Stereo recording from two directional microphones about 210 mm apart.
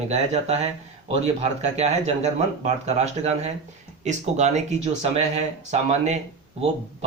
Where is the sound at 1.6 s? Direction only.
30° right (ahead or behind).